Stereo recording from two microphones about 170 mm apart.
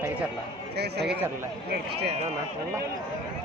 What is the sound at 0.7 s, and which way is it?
A man's voice, 75° right (ahead or behind).